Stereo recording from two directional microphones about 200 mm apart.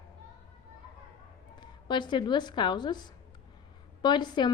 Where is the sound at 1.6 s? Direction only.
20° left (ahead or behind).